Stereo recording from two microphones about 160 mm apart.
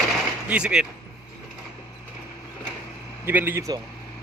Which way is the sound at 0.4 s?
5° right (ahead or behind).